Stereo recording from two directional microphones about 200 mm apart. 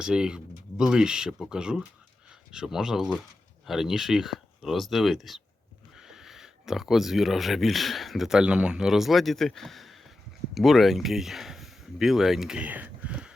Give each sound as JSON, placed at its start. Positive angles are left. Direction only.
{"t": 0.0, "sound": "speech", "side_deg": -5}